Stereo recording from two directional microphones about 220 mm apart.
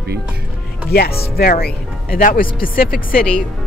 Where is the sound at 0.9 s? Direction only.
45° left (ahead or behind).